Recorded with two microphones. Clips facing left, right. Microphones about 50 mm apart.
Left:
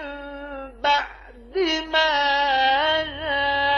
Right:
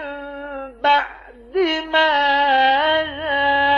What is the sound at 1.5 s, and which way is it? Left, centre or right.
Music, centre.